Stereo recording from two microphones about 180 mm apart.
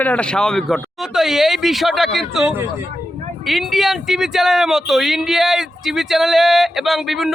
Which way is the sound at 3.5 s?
Centre (ahead or behind).